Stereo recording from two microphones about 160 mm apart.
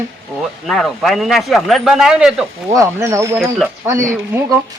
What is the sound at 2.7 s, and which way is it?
Speech, 20° right (ahead or behind).